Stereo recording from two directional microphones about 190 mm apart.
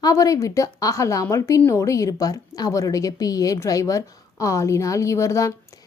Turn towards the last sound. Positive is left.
turn(degrees=15)  # may be behind; listen again after turning